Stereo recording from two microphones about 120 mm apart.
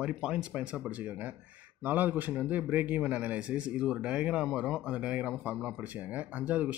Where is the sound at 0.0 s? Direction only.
5° right (ahead or behind).